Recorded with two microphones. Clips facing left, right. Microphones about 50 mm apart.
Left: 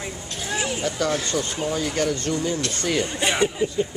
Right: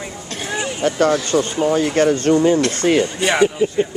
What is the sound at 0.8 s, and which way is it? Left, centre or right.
Speech, right.